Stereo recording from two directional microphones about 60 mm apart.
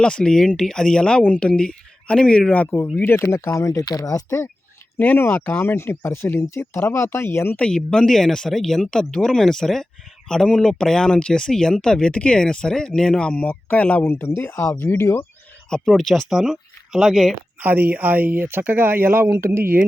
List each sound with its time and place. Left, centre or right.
0.0 s speech: centre
3.0 s speech: left
3.5 s speech: left
3.9 s speech: left
4.9 s speech: left
7.6 s speech: centre
14.1 s speech: left
15.9 s speech: centre
16.3 s speech: centre
17.6 s speech: right